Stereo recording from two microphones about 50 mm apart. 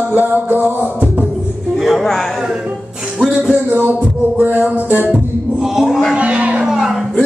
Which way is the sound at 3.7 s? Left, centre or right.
Right.